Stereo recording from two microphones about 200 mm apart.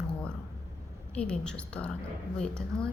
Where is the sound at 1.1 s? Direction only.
5° left (ahead or behind).